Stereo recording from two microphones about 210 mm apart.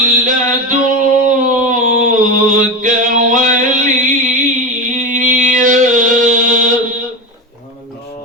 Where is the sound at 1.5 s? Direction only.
40° right (ahead or behind).